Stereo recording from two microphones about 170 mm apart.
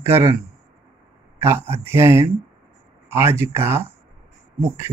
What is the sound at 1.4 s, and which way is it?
Speech, 15° right (ahead or behind).